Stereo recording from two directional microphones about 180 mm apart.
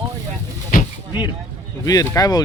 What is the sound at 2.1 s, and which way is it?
Speech, 20° left (ahead or behind).